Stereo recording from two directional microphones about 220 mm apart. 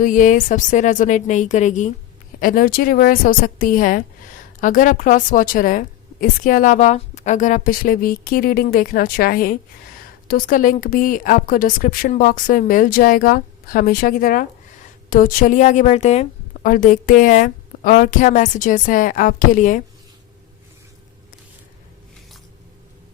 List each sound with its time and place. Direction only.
0.0 s a woman's voice: 35° left (ahead or behind)